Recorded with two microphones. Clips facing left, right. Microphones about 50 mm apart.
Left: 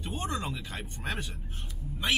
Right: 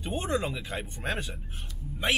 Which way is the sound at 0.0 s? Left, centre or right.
Right.